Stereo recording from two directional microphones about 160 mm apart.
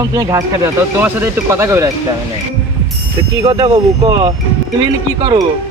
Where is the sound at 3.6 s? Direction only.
30° right (ahead or behind).